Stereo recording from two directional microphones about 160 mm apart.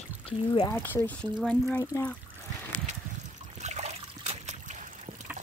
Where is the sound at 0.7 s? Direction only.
10° left (ahead or behind).